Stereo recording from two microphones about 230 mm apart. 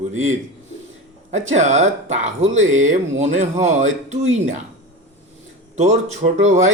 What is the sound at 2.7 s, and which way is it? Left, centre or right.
Mantra, right.